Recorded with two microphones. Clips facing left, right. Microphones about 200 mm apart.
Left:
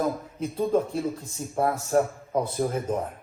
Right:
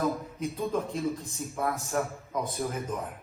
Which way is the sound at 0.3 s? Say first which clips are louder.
Left 6 dB; 30° left (ahead or behind).